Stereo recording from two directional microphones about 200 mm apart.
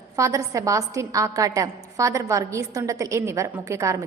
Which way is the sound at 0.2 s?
15° right (ahead or behind).